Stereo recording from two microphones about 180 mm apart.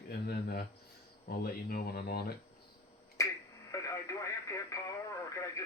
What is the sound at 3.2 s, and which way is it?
Finger snapping, 15° left (ahead or behind).